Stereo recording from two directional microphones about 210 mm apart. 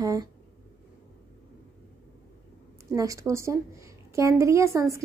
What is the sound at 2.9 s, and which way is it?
A woman's voice, 15° right (ahead or behind).